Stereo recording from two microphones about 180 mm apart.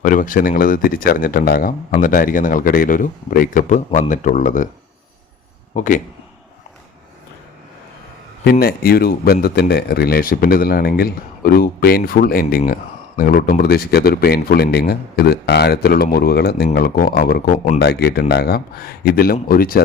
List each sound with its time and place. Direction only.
0.0 s speech: 50° left (ahead or behind)
5.7 s a man's voice: 45° left (ahead or behind)
8.4 s speech: 55° left (ahead or behind)